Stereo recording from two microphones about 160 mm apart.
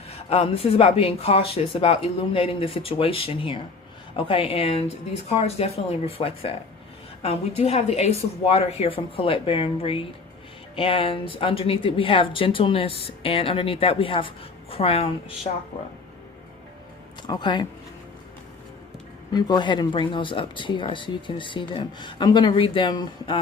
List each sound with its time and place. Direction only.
0.3 s speech: 35° left (ahead or behind)
17.2 s speech: 30° left (ahead or behind)
19.3 s speech: 25° left (ahead or behind)